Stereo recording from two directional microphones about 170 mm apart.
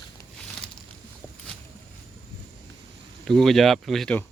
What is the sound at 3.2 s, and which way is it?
Speech, centre (ahead or behind).